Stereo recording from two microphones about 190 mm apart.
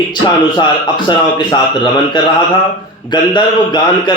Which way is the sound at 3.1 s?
25° left (ahead or behind).